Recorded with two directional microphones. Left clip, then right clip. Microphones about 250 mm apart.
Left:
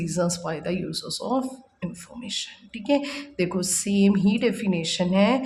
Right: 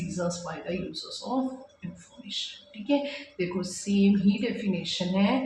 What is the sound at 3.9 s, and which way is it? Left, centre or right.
Speech, left.